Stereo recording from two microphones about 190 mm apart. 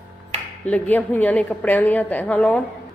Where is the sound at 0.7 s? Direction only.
10° left (ahead or behind).